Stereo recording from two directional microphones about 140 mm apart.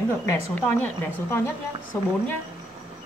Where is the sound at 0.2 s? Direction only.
15° left (ahead or behind).